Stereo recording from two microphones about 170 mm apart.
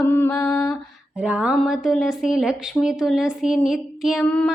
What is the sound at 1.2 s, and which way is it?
Speech, 5° right (ahead or behind).